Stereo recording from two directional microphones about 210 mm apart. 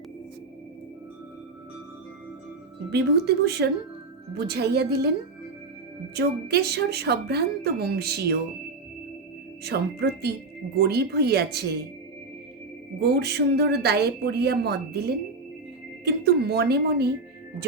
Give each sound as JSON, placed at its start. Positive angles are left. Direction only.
{"t": 2.9, "sound": "a woman's voice", "side_deg": -50}
{"t": 6.1, "sound": "a woman's voice", "side_deg": -50}
{"t": 9.6, "sound": "a woman's voice", "side_deg": -50}
{"t": 13.0, "sound": "a woman's voice", "side_deg": -50}